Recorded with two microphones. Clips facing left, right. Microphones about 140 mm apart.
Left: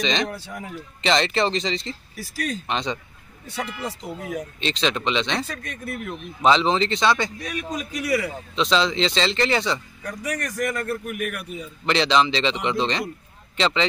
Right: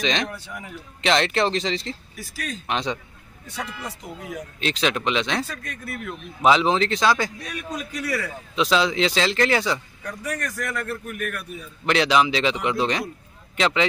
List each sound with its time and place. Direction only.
0.0 s a man's voice: centre (ahead or behind)
2.1 s speech: 40° left (ahead or behind)
2.6 s a man's voice: centre (ahead or behind)
3.4 s speech: 30° left (ahead or behind)
4.6 s a man's voice: 5° right (ahead or behind)
5.5 s speech: 20° left (ahead or behind)
6.4 s a man's voice: 5° right (ahead or behind)
7.7 s a man's voice: 15° left (ahead or behind)
8.5 s a man's voice: 5° right (ahead or behind)
10.0 s a man's voice: 15° left (ahead or behind)
11.8 s a man's voice: 5° right (ahead or behind)